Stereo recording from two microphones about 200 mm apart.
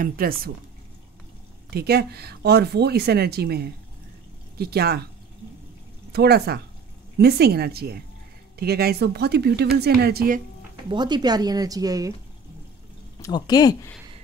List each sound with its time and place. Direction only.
0.0 s speech: 45° right (ahead or behind)
1.7 s speech: 50° right (ahead or behind)
6.1 s speech: 55° right (ahead or behind)
10.9 s speech: 20° right (ahead or behind)
13.2 s speech: 20° left (ahead or behind)